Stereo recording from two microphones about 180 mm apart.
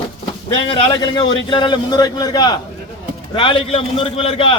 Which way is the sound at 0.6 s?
30° left (ahead or behind).